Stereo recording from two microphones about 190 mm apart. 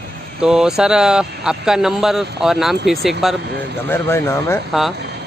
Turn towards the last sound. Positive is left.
turn(degrees=0)  # may be behind; listen again after turning